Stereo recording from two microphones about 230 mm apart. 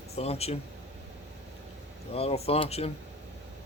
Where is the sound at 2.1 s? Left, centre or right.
Left.